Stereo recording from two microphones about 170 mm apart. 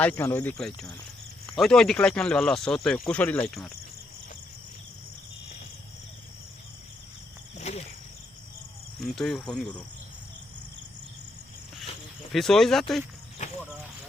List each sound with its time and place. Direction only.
0.0 s speech: 10° left (ahead or behind)
1.5 s speech: 5° left (ahead or behind)
7.5 s cricket: 40° left (ahead or behind)
9.0 s speech: centre (ahead or behind)
12.3 s speech: centre (ahead or behind)